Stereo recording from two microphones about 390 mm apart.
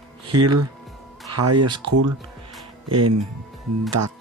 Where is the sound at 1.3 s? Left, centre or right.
Right.